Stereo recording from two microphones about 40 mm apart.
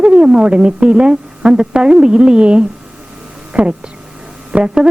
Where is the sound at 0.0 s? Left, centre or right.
Right.